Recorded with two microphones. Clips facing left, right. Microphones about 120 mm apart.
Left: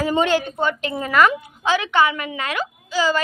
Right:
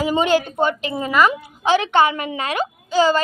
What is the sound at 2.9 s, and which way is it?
Speech, 45° right (ahead or behind).